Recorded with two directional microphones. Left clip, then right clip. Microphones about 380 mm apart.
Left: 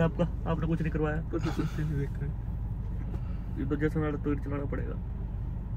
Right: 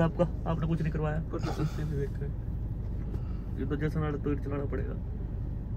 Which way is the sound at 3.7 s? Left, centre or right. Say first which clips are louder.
Left 4 dB; centre.